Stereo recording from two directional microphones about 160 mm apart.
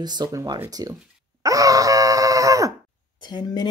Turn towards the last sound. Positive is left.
turn(degrees=25)  # may be behind; listen again after turning